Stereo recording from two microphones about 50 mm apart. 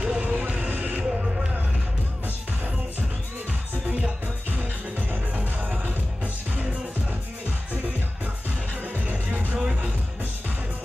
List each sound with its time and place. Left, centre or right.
0.0 s a sound: right
5.1 s music: right
8.9 s music: right